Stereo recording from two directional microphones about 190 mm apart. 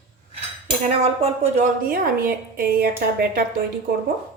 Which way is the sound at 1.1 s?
35° right (ahead or behind).